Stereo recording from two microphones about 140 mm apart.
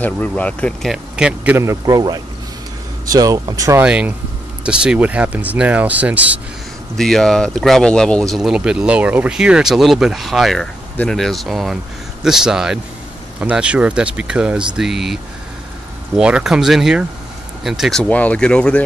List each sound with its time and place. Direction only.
0.0 s speech: 10° left (ahead or behind)
0.9 s speech: 5° right (ahead or behind)
1.6 s speech: 25° right (ahead or behind)
3.8 s speech: 10° right (ahead or behind)
7.0 s speech: 5° left (ahead or behind)
16.2 s speech: 5° right (ahead or behind)
18.0 s speech: 10° left (ahead or behind)